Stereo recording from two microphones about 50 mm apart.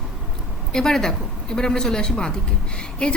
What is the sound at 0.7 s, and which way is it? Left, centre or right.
A woman's voice, centre.